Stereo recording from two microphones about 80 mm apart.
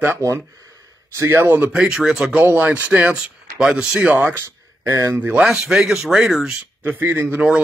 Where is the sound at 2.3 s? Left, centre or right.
Right.